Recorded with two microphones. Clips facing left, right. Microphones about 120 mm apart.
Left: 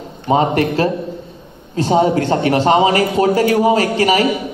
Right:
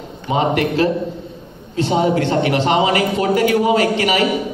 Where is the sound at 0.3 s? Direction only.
40° left (ahead or behind).